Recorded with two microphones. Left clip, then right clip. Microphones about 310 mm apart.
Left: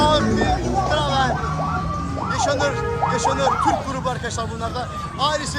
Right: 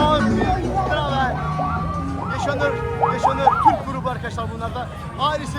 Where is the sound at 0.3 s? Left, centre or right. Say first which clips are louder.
Even; right.